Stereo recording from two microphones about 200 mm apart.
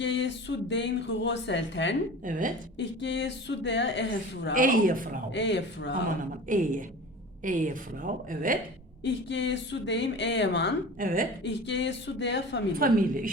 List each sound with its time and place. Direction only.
0.0 s speech: 65° left (ahead or behind)
2.2 s a woman's voice: 40° right (ahead or behind)
2.7 s speech: 65° left (ahead or behind)
4.5 s a woman's voice: 40° right (ahead or behind)
5.3 s speech: 65° left (ahead or behind)
6.1 s a woman's voice: 40° right (ahead or behind)
9.0 s speech: 65° left (ahead or behind)
11.0 s a woman's voice: 45° right (ahead or behind)
11.4 s speech: 65° left (ahead or behind)
12.8 s a woman's voice: 45° right (ahead or behind)